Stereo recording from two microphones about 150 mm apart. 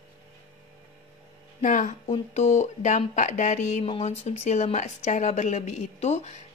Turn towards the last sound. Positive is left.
turn(degrees=45)  # may be behind; listen again after turning